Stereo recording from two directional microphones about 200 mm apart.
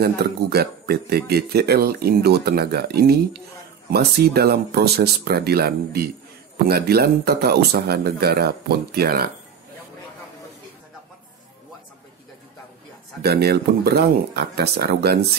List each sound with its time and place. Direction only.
0.0 s speech: 50° right (ahead or behind)
13.2 s speech: 50° right (ahead or behind)